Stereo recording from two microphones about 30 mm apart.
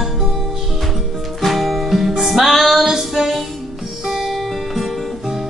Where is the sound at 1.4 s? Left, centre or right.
Centre.